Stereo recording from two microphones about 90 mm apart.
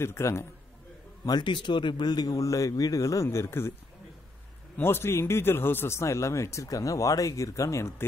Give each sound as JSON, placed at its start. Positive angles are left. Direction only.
{"t": 0.0, "sound": "speech", "side_deg": 30}
{"t": 1.2, "sound": "speech", "side_deg": 55}
{"t": 4.7, "sound": "speech", "side_deg": 25}